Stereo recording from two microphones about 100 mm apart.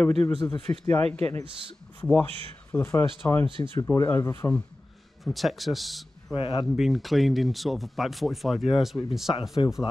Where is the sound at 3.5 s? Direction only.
60° right (ahead or behind).